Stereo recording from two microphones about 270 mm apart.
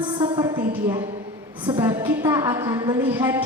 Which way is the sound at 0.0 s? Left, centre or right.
Centre.